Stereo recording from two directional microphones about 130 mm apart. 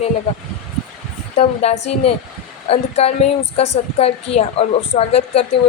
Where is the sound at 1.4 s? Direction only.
55° left (ahead or behind).